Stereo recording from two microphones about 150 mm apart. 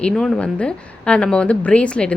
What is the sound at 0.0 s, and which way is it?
A woman's voice, 5° left (ahead or behind).